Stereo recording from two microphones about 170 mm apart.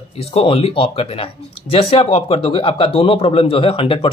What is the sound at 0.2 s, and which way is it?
Speech, 35° left (ahead or behind).